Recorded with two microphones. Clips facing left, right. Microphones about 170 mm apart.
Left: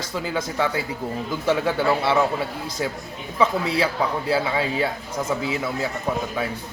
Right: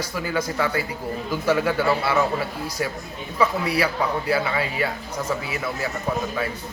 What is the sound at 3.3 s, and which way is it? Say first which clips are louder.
Speech: left 1 dB; 25° left (ahead or behind).